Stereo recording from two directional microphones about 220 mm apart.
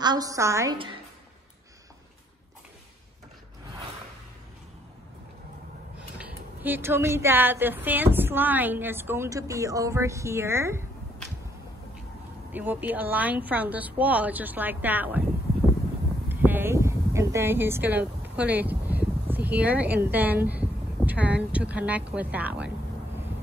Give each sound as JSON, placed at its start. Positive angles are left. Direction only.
{"t": 0.0, "sound": "speech", "side_deg": -15}
{"t": 6.1, "sound": "speech", "side_deg": -5}
{"t": 12.5, "sound": "speech", "side_deg": -10}
{"t": 16.3, "sound": "speech", "side_deg": -10}